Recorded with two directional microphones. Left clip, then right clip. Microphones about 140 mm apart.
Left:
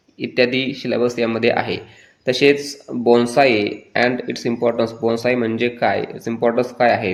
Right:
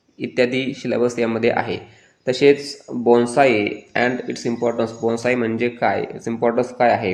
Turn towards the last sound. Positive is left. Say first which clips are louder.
# left 1 dB
turn(degrees=10)  # may be behind; listen again after turning